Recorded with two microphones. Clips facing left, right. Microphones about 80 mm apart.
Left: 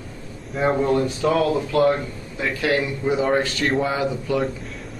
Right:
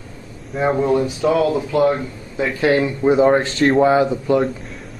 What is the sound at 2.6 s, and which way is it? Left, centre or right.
Speech, right.